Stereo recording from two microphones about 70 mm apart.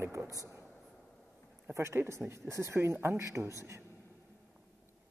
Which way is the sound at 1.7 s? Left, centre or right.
Right.